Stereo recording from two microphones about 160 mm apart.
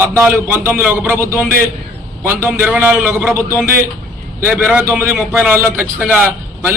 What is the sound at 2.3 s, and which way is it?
Speech, 15° right (ahead or behind).